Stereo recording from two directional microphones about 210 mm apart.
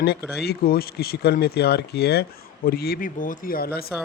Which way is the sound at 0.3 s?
50° left (ahead or behind).